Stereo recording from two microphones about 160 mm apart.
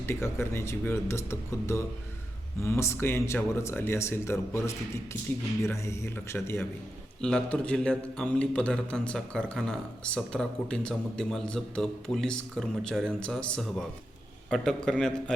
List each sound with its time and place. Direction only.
0.0 s speech: 15° left (ahead or behind)
7.2 s a man's voice: 5° left (ahead or behind)